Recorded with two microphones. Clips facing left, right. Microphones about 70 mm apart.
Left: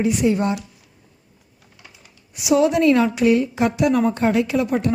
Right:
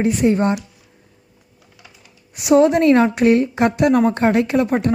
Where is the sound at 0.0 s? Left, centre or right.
Right.